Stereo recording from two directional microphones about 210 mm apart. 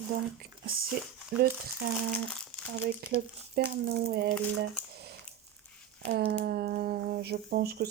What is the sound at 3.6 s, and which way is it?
Speech, 50° right (ahead or behind).